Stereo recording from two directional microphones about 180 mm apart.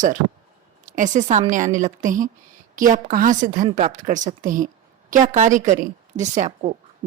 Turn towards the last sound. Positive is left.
turn(degrees=-40)  # may be behind; listen again after turning